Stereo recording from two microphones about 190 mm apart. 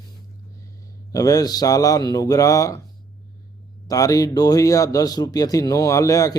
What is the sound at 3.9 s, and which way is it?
A man's voice, 20° left (ahead or behind).